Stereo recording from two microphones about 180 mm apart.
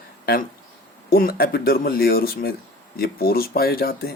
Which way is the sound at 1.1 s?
60° left (ahead or behind).